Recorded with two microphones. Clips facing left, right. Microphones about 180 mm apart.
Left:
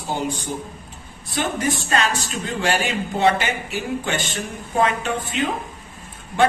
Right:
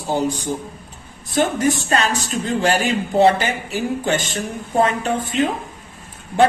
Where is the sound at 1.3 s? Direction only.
45° right (ahead or behind).